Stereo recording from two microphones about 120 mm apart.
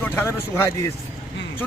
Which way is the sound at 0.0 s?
20° left (ahead or behind).